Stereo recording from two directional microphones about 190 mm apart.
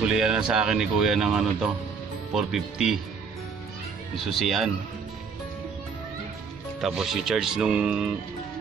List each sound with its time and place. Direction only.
0.0 s speech: 5° right (ahead or behind)
4.3 s speech: centre (ahead or behind)
6.8 s speech: centre (ahead or behind)